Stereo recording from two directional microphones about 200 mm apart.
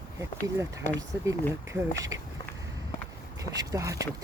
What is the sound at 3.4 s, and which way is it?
Speech, 15° right (ahead or behind).